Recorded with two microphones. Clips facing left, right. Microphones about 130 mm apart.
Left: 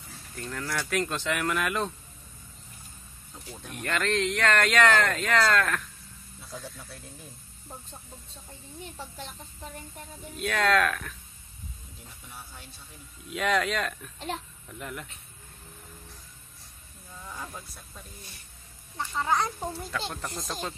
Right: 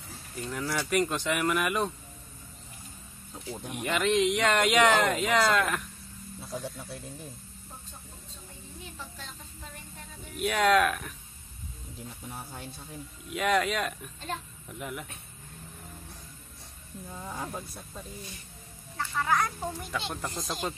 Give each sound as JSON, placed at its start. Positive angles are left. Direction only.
{"t": 0.4, "sound": "speech", "side_deg": -10}
{"t": 3.5, "sound": "speech", "side_deg": -15}
{"t": 10.3, "sound": "speech", "side_deg": -10}
{"t": 12.3, "sound": "speech", "side_deg": -45}
{"t": 13.3, "sound": "speech", "side_deg": -5}
{"t": 17.1, "sound": "speech", "side_deg": -35}
{"t": 18.9, "sound": "speech", "side_deg": 20}
{"t": 20.0, "sound": "speech", "side_deg": -5}